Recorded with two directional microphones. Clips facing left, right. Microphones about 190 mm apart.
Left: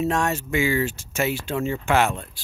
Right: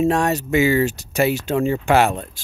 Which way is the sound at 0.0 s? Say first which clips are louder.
Right 5 dB; 35° right (ahead or behind).